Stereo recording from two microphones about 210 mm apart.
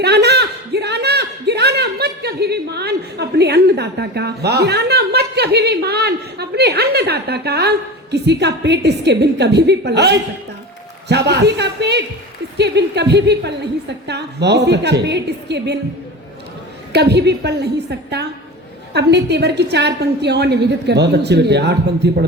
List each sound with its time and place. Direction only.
0.0 s a woman's voice: 50° right (ahead or behind)
16.9 s a woman's voice: 55° right (ahead or behind)
18.9 s a woman's voice: 55° right (ahead or behind)